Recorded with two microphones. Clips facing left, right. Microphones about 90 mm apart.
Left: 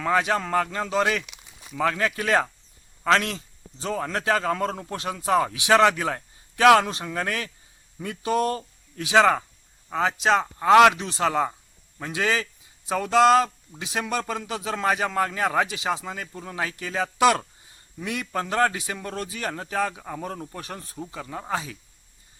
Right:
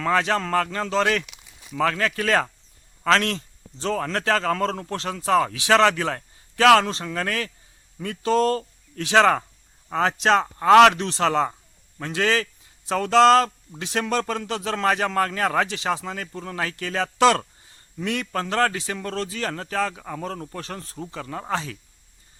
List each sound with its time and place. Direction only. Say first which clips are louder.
0.0 s a man's voice: right 1 dB; 10° left (ahead or behind)